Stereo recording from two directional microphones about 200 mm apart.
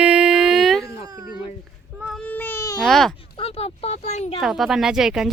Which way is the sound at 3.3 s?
30° left (ahead or behind).